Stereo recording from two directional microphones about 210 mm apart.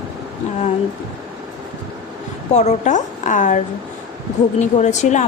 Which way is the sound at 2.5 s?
35° left (ahead or behind).